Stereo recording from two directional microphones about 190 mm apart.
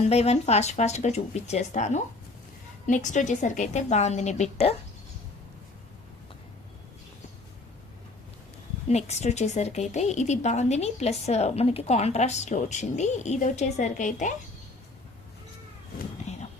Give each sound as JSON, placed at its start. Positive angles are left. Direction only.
{"t": 0.1, "sound": "a woman's voice", "side_deg": 35}
{"t": 8.9, "sound": "a woman's voice", "side_deg": 35}
{"t": 16.3, "sound": "a sound", "side_deg": 35}